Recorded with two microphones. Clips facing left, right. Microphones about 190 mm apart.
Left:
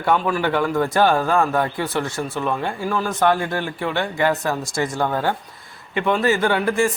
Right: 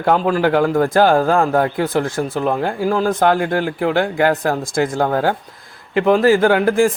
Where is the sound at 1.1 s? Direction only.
50° right (ahead or behind).